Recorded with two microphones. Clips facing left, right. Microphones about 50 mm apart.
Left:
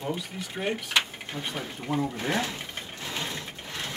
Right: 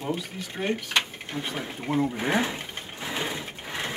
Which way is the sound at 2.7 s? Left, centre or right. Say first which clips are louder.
Right 1 dB; centre.